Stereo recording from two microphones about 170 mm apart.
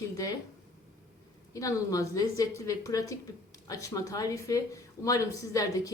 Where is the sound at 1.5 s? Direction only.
20° left (ahead or behind).